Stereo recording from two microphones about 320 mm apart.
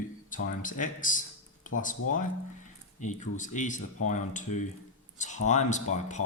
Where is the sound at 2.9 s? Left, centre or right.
Left.